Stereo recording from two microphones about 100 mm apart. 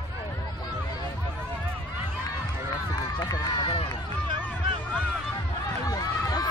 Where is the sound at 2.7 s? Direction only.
40° left (ahead or behind).